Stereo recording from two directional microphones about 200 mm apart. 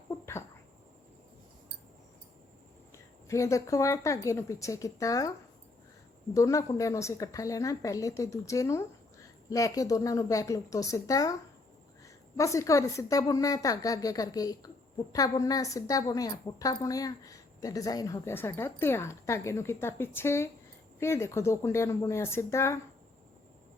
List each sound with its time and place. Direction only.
0.1 s a sound: 15° left (ahead or behind)
2.9 s a woman's voice: 15° left (ahead or behind)
6.3 s a woman's voice: 15° left (ahead or behind)